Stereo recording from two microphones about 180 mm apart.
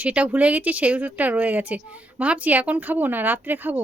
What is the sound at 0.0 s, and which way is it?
A woman's voice, 10° right (ahead or behind).